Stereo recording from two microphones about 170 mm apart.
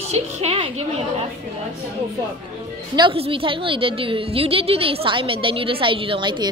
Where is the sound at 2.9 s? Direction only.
30° right (ahead or behind).